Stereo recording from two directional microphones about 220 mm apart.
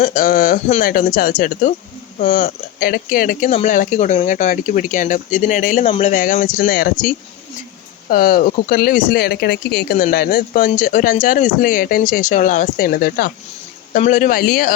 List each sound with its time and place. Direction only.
0.0 s speech: 40° left (ahead or behind)
8.1 s speech: 40° left (ahead or behind)